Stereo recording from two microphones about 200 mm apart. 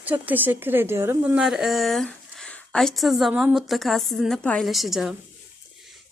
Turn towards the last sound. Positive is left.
turn(degrees=0)  # may be behind; listen again after turning